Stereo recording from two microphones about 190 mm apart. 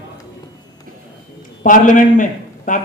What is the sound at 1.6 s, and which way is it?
A man's voice, 45° left (ahead or behind).